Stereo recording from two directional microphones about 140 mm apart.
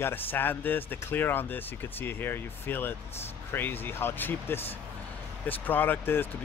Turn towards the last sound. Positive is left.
turn(degrees=15)  # may be behind; listen again after turning